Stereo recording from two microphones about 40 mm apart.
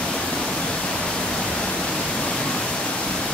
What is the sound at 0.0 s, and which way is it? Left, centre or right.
Pink noise, centre.